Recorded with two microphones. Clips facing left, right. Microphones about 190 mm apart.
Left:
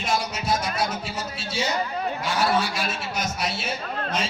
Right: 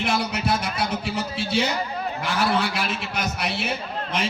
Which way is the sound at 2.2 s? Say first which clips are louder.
Right 1 dB; 60° right (ahead or behind).